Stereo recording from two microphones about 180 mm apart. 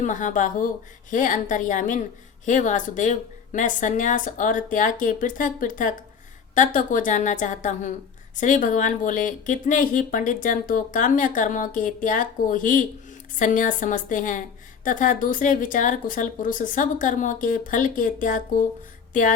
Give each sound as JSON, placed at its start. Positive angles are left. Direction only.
{"t": 0.0, "sound": "speech", "side_deg": 45}